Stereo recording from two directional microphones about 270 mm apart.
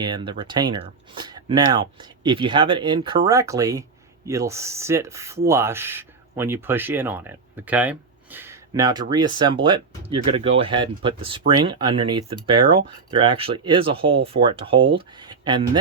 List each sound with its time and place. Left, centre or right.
0.0 s speech: centre